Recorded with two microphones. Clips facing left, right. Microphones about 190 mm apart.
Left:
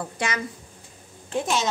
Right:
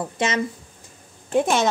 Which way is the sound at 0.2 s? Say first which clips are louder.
Right 5 dB; 20° right (ahead or behind).